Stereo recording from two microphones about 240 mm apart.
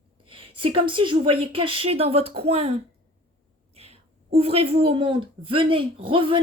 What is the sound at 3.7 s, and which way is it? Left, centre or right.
A woman's voice, right.